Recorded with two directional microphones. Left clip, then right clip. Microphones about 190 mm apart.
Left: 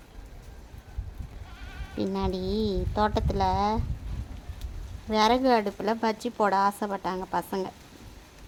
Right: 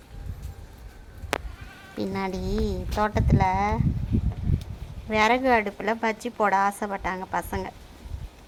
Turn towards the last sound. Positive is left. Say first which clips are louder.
# right 1 dB
turn(degrees=20)  # may be behind; listen again after turning